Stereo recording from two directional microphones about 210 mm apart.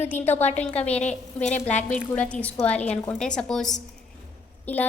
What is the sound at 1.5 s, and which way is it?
Speech, 35° left (ahead or behind).